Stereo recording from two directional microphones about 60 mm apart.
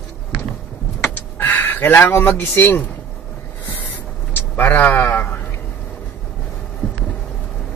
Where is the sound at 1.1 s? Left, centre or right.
Left.